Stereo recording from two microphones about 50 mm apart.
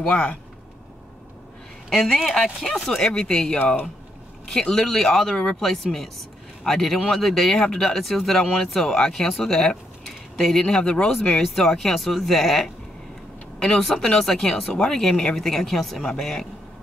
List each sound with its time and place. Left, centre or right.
0.0 s speech: left
1.9 s speech: centre
3.0 s speech: centre
11.3 s speech: centre